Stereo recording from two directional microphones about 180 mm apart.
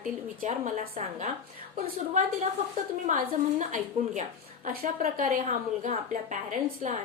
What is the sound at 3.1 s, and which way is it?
A woman's voice, 45° right (ahead or behind).